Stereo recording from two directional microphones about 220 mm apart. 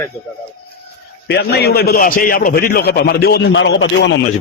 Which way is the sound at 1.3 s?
45° left (ahead or behind).